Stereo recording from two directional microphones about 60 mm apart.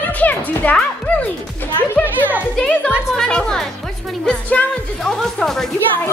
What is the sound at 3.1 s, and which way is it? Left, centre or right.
Speech, centre.